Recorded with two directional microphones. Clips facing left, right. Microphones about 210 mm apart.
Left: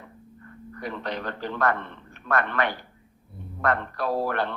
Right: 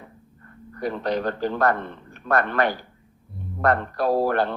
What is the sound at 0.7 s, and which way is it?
A man's voice, 40° right (ahead or behind).